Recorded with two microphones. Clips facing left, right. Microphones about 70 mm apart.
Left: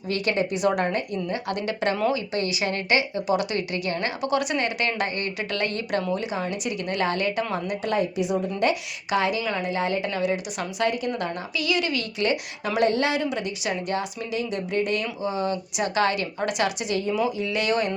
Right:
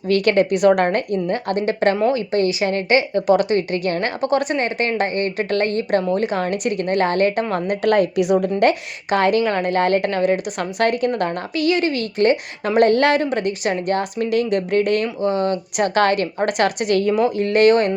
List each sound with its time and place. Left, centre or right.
0.1 s a woman's voice: right
3.2 s a woman's voice: right
6.1 s a woman's voice: right
7.5 s a woman's voice: right